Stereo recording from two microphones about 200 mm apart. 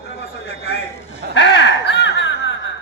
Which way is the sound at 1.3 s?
60° left (ahead or behind).